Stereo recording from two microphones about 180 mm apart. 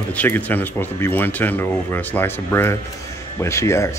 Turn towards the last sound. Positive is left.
turn(degrees=15)  # may be behind; listen again after turning